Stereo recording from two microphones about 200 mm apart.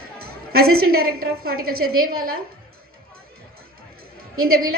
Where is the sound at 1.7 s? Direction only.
90° right.